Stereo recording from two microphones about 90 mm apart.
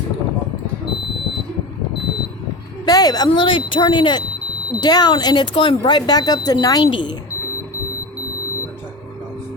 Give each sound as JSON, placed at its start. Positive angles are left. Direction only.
{"t": 2.8, "sound": "a sound", "side_deg": 45}
{"t": 3.2, "sound": "speech", "side_deg": 80}
{"t": 4.8, "sound": "speech", "side_deg": 50}
{"t": 6.9, "sound": "speech", "side_deg": 55}